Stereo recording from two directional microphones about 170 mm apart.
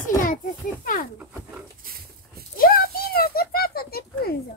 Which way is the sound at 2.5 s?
60° left (ahead or behind).